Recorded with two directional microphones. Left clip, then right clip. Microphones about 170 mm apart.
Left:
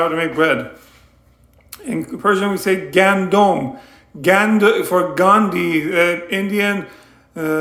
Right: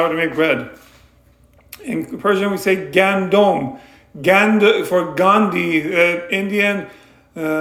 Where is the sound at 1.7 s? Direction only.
20° left (ahead or behind).